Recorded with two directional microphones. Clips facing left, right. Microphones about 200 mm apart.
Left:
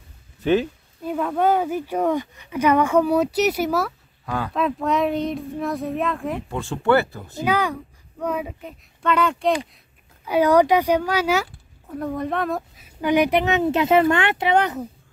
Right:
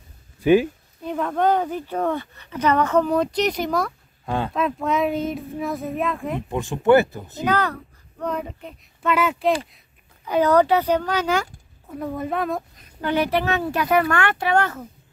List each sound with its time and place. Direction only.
0.4 s speech: 10° right (ahead or behind)
1.0 s speech: 5° left (ahead or behind)
6.5 s speech: 15° right (ahead or behind)
7.4 s speech: 10° left (ahead or behind)
10.2 s speech: 10° left (ahead or behind)
11.9 s speech: 5° right (ahead or behind); by 14.9 s 20° left (ahead or behind)